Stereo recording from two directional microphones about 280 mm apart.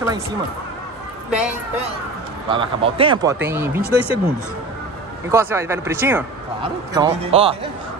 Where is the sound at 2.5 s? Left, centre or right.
Centre.